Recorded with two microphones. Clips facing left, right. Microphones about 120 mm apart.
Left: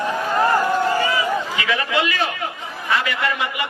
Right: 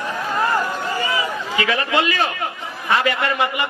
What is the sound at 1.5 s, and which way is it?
A man's voice, 40° right (ahead or behind).